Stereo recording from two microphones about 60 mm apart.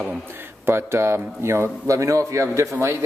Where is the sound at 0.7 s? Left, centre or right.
Right.